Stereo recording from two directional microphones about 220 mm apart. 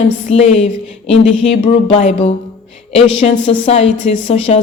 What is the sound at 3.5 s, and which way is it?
Music, 25° left (ahead or behind).